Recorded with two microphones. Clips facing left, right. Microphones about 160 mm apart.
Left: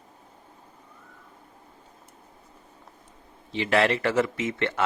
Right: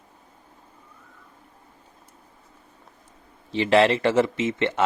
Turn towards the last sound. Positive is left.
turn(degrees=-20)  # may be behind; listen again after turning